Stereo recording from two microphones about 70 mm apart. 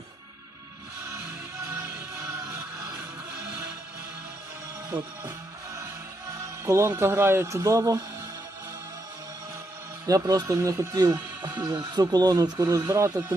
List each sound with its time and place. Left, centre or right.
1.7 s music: right
4.9 s speech: right
6.7 s speech: right
10.1 s speech: right